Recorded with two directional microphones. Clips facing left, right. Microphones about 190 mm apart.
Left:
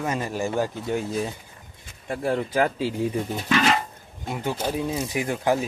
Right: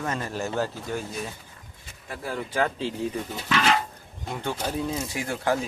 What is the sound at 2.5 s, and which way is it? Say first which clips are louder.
A man's voice: left 3 dB; 10° left (ahead or behind).